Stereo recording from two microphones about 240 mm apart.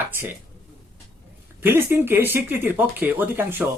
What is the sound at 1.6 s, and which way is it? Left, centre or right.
Speech, centre.